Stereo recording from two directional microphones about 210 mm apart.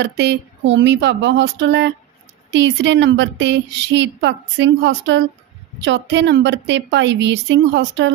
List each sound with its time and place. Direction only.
0.0 s a woman's voice: 55° right (ahead or behind)